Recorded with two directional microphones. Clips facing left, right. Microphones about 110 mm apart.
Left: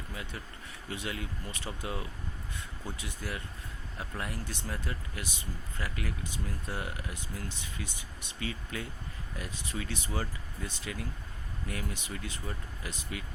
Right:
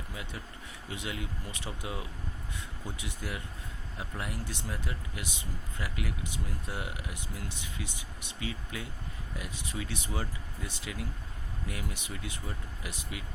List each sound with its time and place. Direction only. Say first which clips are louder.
0.1 s speech: left 1 dB; 15° right (ahead or behind)